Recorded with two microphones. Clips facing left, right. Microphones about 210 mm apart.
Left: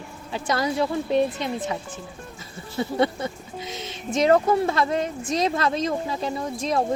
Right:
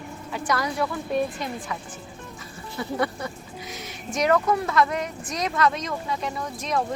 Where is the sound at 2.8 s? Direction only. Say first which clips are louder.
Left 4 dB; 25° left (ahead or behind).